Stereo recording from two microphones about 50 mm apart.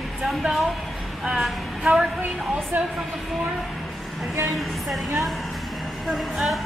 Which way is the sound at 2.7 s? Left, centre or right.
Right.